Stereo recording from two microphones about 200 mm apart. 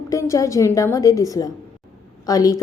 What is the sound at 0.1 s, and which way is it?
Speech, 15° left (ahead or behind).